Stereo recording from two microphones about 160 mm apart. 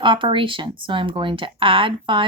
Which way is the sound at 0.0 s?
30° right (ahead or behind).